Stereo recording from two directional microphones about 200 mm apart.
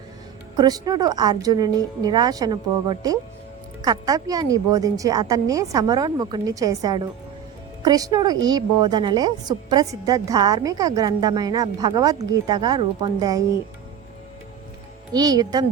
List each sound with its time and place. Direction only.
0.5 s a woman's voice: 20° right (ahead or behind)
15.1 s a woman's voice: 20° right (ahead or behind)